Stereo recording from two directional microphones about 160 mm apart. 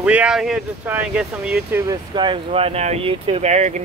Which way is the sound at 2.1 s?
30° right (ahead or behind).